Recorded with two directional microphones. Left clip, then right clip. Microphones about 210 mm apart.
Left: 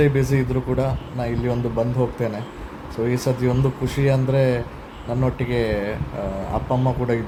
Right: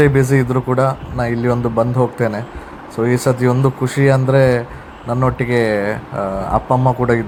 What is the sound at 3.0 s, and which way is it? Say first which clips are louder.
Speech: right 7 dB; 15° right (ahead or behind).